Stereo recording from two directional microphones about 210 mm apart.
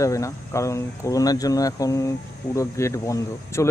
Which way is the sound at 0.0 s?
15° left (ahead or behind).